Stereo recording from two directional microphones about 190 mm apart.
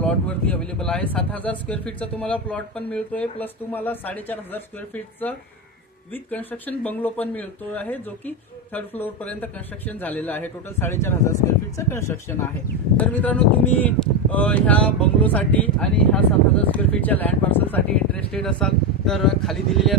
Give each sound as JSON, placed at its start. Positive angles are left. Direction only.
{"t": 0.0, "sound": "speech", "side_deg": 5}